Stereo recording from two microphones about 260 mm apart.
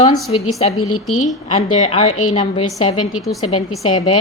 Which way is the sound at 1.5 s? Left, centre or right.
Left.